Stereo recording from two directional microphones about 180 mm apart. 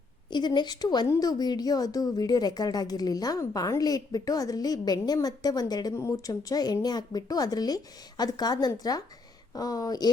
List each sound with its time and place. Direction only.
0.3 s a woman's voice: 25° left (ahead or behind)